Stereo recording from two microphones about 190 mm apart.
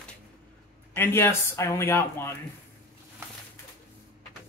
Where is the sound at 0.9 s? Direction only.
10° left (ahead or behind).